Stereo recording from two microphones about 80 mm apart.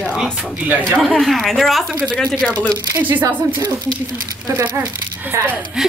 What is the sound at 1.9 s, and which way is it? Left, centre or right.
Speech, centre.